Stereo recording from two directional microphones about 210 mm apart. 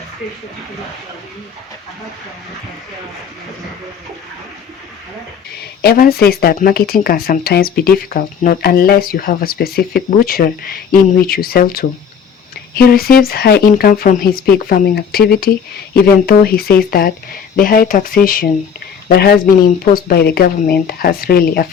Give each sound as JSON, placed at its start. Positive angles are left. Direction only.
{"t": 5.8, "sound": "speech", "side_deg": 45}